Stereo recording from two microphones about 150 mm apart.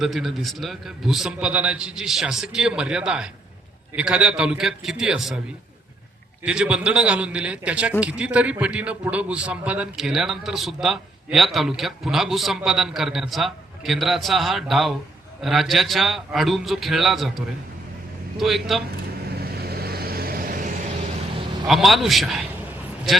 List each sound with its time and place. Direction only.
0.0 s a man's voice: centre (ahead or behind)
6.4 s a man's voice: 5° right (ahead or behind)
19.5 s vehicle: 90° right; by 20.7 s 70° right (ahead or behind)
21.7 s a man's voice: centre (ahead or behind)